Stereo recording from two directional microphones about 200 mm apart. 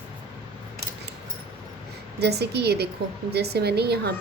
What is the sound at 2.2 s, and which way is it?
A woman's voice, 55° right (ahead or behind).